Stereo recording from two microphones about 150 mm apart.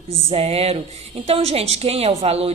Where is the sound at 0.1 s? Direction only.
40° right (ahead or behind).